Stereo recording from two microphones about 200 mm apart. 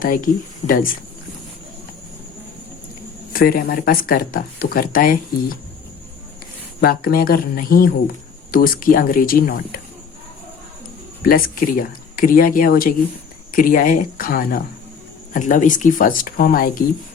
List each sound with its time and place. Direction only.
0.0 s speech: 45° left (ahead or behind)
3.3 s speech: 45° left (ahead or behind)
6.8 s speech: 45° left (ahead or behind)
11.2 s speech: 45° left (ahead or behind)